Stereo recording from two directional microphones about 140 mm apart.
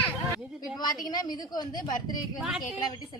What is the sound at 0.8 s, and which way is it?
A woman's voice, 30° left (ahead or behind).